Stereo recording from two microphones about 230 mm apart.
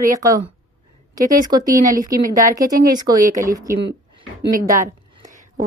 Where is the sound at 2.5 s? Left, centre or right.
Centre.